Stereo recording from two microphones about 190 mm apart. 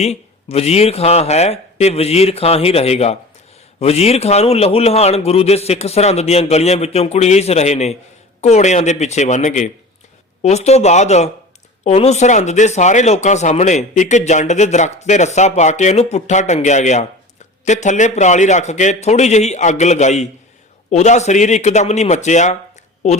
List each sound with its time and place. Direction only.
0.0 s speech: 35° left (ahead or behind)